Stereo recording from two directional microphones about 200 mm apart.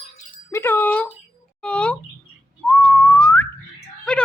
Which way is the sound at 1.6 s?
5° left (ahead or behind).